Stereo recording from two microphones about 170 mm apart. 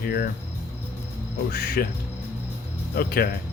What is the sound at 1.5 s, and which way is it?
Speech, 60° left (ahead or behind).